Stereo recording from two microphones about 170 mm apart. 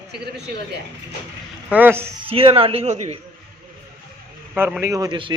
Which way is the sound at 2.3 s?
35° right (ahead or behind).